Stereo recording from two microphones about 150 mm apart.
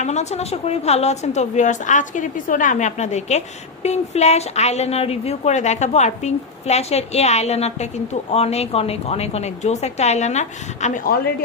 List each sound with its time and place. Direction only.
0.0 s a woman's voice: 50° left (ahead or behind)